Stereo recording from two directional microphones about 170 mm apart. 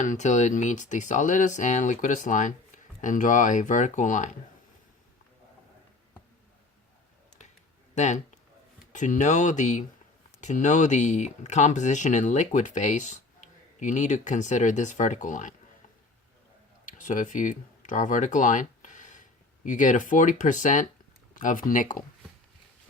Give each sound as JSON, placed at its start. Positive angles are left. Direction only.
{"t": 0.0, "sound": "speech", "side_deg": 45}
{"t": 7.9, "sound": "speech", "side_deg": 45}
{"t": 16.8, "sound": "speech", "side_deg": 50}